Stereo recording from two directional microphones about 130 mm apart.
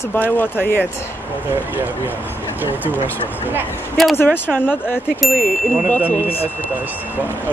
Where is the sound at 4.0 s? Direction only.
Centre (ahead or behind).